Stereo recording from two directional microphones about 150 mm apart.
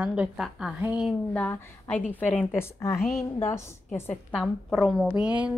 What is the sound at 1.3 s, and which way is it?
A woman's voice, 10° left (ahead or behind).